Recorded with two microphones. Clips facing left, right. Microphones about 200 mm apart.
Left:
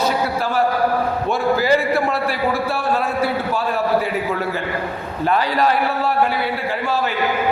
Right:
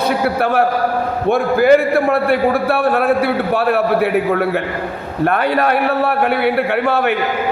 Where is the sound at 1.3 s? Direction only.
55° right (ahead or behind).